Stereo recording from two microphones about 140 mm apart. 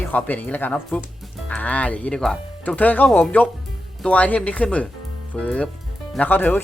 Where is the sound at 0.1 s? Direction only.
10° left (ahead or behind).